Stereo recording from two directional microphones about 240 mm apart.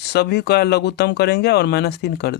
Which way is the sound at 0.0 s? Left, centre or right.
Left.